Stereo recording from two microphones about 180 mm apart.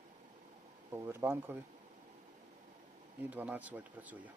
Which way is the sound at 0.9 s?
15° right (ahead or behind).